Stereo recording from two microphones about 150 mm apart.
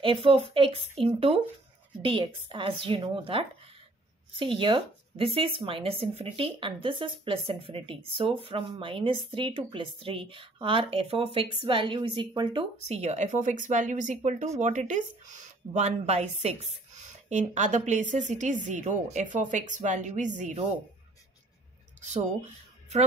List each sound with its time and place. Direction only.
0.0 s a woman's voice: 35° right (ahead or behind); by 20.5 s 55° right (ahead or behind)
22.0 s speech: 50° right (ahead or behind)